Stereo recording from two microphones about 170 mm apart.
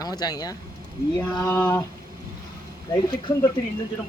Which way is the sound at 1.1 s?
10° left (ahead or behind).